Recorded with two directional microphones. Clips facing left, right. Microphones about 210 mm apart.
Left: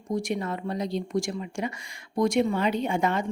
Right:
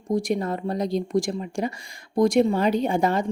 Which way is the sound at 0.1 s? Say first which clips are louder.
Right 4 dB; 35° right (ahead or behind).